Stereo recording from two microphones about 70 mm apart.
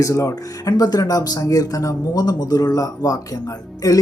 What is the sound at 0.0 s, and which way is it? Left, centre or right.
Speech, left.